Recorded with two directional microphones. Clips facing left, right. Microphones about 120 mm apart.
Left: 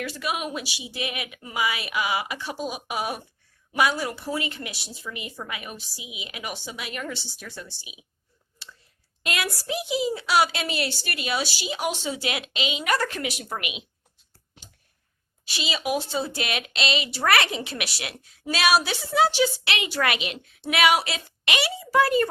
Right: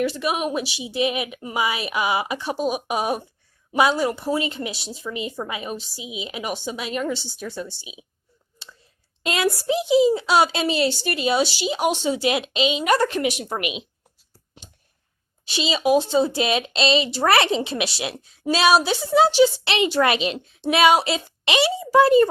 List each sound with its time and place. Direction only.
0.1 s speech: 25° right (ahead or behind)
9.2 s speech: 25° right (ahead or behind)
14.3 s a sound: 20° right (ahead or behind)
15.4 s speech: 25° right (ahead or behind)